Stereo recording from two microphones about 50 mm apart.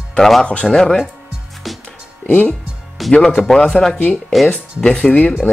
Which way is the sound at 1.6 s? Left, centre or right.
Centre.